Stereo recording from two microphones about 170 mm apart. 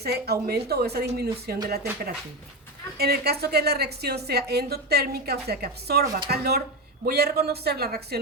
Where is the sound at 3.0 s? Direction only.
65° right (ahead or behind).